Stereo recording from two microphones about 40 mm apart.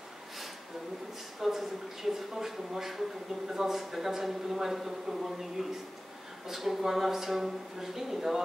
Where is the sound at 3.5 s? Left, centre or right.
Centre.